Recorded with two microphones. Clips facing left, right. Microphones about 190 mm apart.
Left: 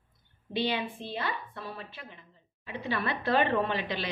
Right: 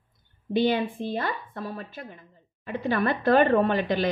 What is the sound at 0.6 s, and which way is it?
Speech, 50° right (ahead or behind).